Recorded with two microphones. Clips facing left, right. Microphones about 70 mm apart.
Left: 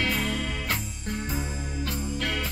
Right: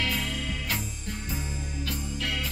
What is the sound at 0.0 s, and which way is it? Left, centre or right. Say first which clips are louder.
Music: left 3 dB; left.